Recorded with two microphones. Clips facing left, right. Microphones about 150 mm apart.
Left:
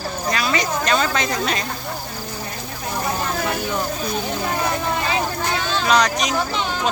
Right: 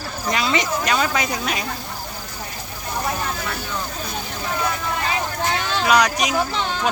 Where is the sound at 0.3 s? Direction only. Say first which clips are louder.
Right 1 dB; 20° right (ahead or behind).